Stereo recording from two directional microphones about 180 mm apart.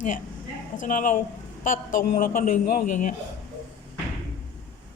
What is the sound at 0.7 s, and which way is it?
A man's voice, 45° left (ahead or behind).